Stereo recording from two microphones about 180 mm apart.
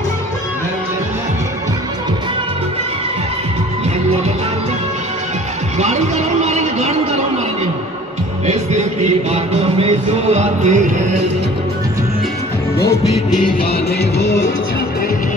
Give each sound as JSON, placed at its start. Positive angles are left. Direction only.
{"t": 5.8, "sound": "a sound", "side_deg": -40}
{"t": 9.0, "sound": "music", "side_deg": -35}
{"t": 14.2, "sound": "music", "side_deg": 15}